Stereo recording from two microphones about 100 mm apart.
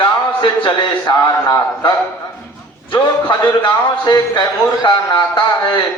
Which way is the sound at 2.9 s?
40° left (ahead or behind).